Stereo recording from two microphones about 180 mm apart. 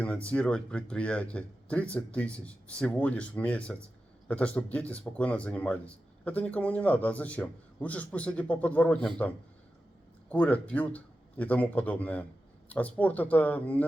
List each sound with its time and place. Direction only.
0.0 s speech: 5° left (ahead or behind)